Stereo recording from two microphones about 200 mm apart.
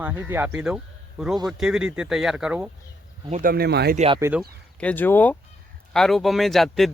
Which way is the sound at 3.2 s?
35° right (ahead or behind).